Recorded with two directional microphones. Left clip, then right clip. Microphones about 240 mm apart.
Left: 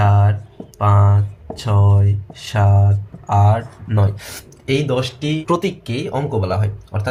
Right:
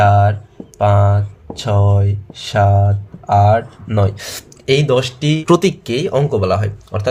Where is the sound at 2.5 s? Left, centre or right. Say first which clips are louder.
Right 6 dB; right.